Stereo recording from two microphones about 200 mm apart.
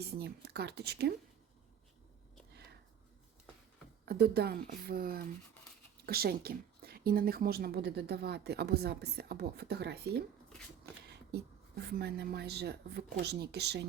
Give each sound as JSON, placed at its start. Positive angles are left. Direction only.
{"t": 0.1, "sound": "speech", "side_deg": -55}
{"t": 4.0, "sound": "a woman's voice", "side_deg": -50}